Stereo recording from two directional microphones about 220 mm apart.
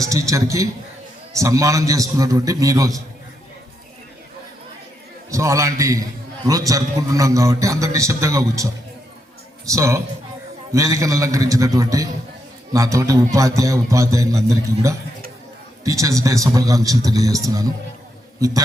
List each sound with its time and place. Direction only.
0.0 s a man's voice: 15° right (ahead or behind)
5.3 s a man's voice: 15° right (ahead or behind)